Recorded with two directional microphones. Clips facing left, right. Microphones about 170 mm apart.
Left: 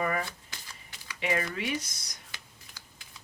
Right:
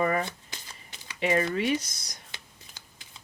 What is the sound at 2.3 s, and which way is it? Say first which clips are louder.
Whispering: right 2 dB; 25° right (ahead or behind).